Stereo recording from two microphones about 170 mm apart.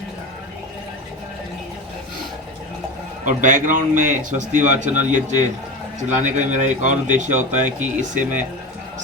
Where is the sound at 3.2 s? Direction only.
50° right (ahead or behind).